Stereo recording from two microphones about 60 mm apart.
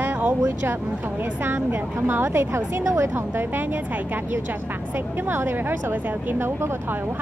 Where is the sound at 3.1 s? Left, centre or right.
Right.